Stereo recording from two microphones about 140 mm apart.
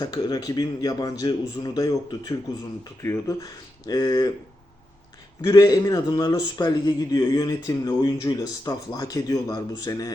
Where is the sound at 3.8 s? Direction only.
30° left (ahead or behind).